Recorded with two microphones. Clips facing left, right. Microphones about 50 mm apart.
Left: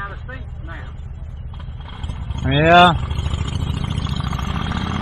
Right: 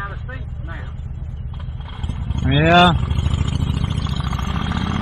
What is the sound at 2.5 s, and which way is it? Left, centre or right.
Speech, centre.